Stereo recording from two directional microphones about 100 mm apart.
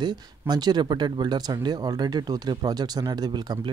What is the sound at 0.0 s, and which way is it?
Speech, 45° right (ahead or behind).